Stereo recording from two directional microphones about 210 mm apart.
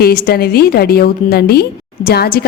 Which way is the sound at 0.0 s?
45° left (ahead or behind).